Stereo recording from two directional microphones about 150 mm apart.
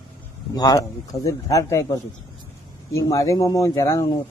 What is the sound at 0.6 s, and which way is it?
A man's voice, 25° left (ahead or behind).